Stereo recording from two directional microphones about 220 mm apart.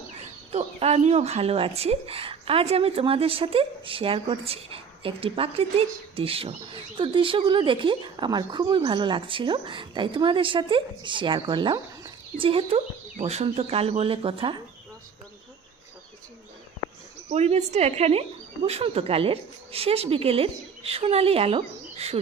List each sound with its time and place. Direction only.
0.2 s speech: 30° right (ahead or behind)
17.2 s speech: 30° right (ahead or behind)